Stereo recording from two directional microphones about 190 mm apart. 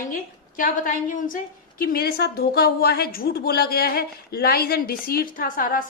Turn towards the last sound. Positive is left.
turn(degrees=45)  # may be behind; listen again after turning